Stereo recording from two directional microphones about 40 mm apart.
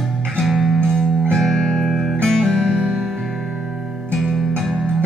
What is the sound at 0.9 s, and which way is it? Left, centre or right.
Music, centre.